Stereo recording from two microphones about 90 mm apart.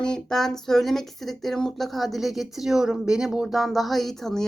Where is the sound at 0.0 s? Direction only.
5° left (ahead or behind).